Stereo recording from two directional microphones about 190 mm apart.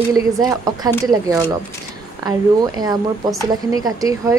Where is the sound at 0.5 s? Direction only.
20° right (ahead or behind).